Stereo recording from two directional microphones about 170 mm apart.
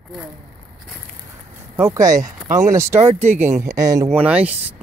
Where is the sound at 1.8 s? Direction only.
20° right (ahead or behind).